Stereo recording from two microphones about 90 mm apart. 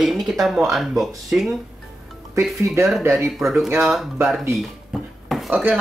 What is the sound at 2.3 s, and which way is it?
Speech, 30° right (ahead or behind).